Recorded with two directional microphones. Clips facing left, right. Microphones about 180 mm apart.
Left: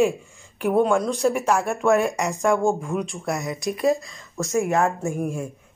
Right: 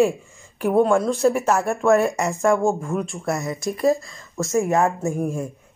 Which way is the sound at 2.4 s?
Centre (ahead or behind).